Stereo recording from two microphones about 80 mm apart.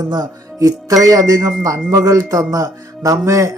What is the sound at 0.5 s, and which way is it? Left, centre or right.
Speech, right.